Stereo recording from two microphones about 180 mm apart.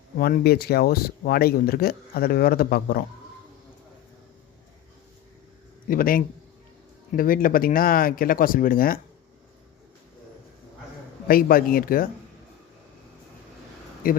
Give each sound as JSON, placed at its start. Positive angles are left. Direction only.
{"t": 0.2, "sound": "speech", "side_deg": 55}
{"t": 5.9, "sound": "speech", "side_deg": 50}
{"t": 11.3, "sound": "speech", "side_deg": 50}
{"t": 14.0, "sound": "speech", "side_deg": 50}